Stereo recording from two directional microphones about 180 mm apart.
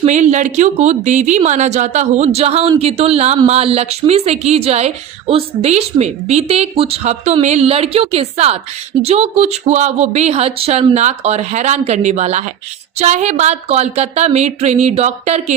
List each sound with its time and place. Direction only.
0.0 s speech: 40° right (ahead or behind)